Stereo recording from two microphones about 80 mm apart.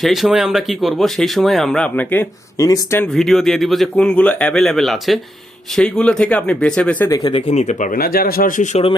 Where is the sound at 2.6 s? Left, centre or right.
Left.